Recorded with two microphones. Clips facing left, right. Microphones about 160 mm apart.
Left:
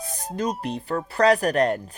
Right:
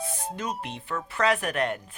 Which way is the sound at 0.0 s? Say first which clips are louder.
Left 5 dB; 40° left (ahead or behind).